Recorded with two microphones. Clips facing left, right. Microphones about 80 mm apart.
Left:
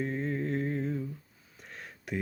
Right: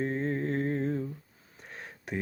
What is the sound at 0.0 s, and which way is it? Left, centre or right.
Humming, right.